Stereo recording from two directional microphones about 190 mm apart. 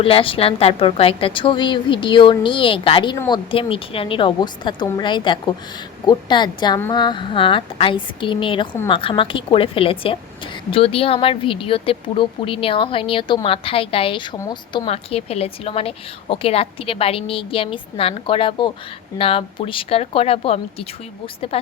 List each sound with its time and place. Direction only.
0.0 s a woman's voice: 30° left (ahead or behind)